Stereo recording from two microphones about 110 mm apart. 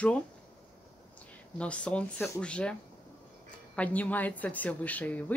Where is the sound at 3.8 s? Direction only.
15° left (ahead or behind).